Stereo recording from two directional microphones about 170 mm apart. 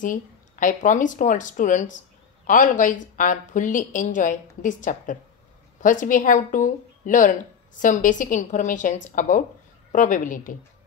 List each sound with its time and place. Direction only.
0.0 s speech: 50° left (ahead or behind)